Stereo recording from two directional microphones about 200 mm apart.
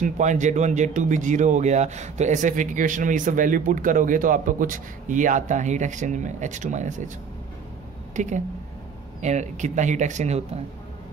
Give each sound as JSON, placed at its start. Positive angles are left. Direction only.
{"t": 0.0, "sound": "speech", "side_deg": -40}
{"t": 8.2, "sound": "speech", "side_deg": -35}